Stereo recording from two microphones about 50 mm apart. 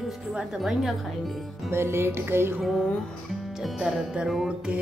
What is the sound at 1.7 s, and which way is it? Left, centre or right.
Music, right.